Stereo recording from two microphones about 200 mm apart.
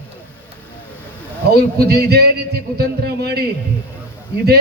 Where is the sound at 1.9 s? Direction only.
50° right (ahead or behind).